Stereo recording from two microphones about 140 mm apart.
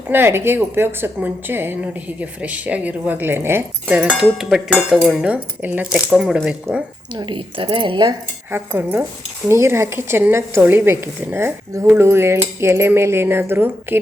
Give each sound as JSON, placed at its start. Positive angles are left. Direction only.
{"t": 0.1, "sound": "a woman's voice", "side_deg": -15}
{"t": 4.2, "sound": "a sound", "side_deg": -5}
{"t": 4.9, "sound": "a woman's voice", "side_deg": -5}
{"t": 7.1, "sound": "a woman's voice", "side_deg": -35}
{"t": 8.4, "sound": "a woman's voice", "side_deg": -15}